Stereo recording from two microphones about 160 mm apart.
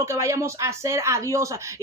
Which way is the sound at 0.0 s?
20° right (ahead or behind).